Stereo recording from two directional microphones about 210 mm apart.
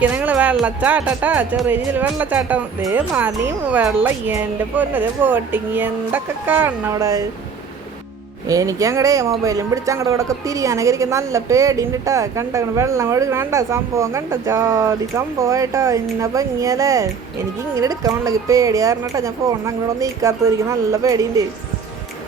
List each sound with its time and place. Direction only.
0.0 s a woman's voice: 5° right (ahead or behind)
8.4 s a woman's voice: 15° right (ahead or behind)